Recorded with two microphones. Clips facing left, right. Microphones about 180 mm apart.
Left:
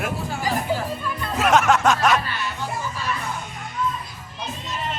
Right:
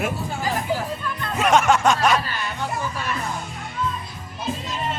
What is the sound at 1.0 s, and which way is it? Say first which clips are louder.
Speech: even; 5° left (ahead or behind).